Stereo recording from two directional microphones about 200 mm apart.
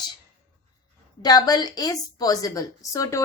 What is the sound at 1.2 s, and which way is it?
A woman's voice, 20° left (ahead or behind).